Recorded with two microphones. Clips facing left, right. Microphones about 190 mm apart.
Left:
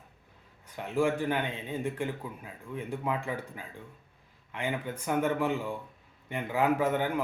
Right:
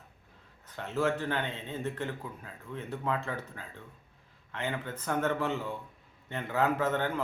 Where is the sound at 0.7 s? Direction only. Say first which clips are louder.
Left 2 dB; 10° left (ahead or behind).